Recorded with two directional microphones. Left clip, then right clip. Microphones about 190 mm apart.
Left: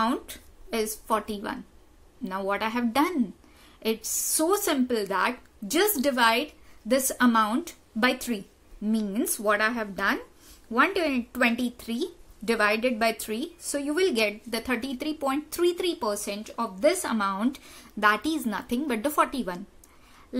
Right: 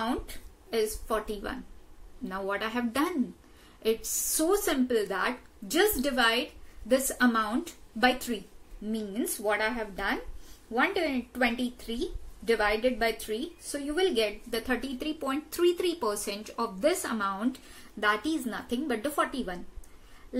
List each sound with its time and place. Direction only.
0.0 s a woman's voice: 50° left (ahead or behind)